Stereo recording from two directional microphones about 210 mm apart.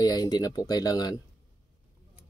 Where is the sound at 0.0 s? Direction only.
20° left (ahead or behind).